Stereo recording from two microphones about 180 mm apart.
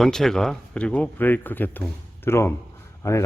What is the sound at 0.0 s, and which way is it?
Speech, centre (ahead or behind).